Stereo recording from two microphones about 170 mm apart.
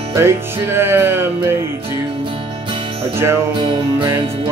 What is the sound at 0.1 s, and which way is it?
Music, 15° right (ahead or behind).